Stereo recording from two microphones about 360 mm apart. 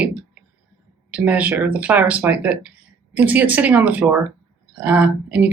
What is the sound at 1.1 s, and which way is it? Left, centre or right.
Speech, centre.